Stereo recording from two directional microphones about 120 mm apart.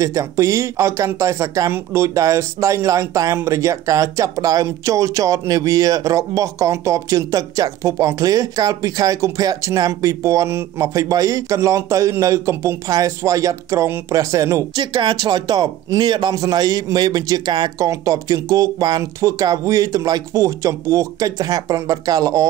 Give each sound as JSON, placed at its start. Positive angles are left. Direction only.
{"t": 0.0, "sound": "speech", "side_deg": -25}
{"t": 14.8, "sound": "speech", "side_deg": -40}